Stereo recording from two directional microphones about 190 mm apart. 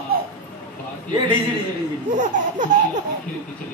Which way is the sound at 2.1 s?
40° right (ahead or behind).